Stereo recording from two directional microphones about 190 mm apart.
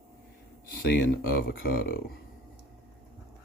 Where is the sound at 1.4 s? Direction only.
55° left (ahead or behind).